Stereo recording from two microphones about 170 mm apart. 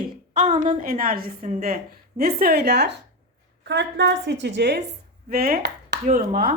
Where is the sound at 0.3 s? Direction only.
40° right (ahead or behind); by 2.9 s 75° right (ahead or behind).